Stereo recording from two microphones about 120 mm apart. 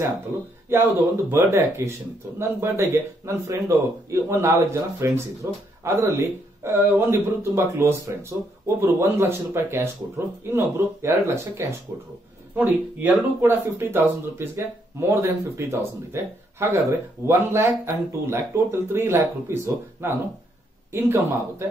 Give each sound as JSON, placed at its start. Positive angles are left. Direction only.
{"t": 0.7, "sound": "speech", "side_deg": -20}